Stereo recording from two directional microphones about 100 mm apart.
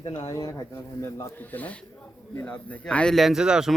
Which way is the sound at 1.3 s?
20° left (ahead or behind).